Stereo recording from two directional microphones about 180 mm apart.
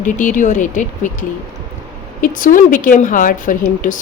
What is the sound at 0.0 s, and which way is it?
Speech, 45° left (ahead or behind).